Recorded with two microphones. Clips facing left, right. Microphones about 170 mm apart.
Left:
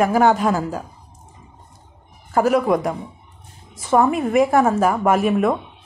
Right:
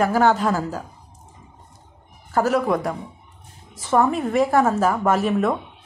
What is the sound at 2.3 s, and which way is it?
Speech, 15° left (ahead or behind).